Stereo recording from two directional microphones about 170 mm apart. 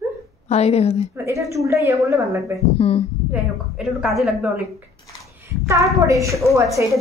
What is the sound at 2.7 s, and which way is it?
Speech, 35° left (ahead or behind).